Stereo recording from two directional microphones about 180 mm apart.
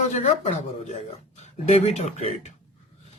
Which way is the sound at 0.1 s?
40° left (ahead or behind).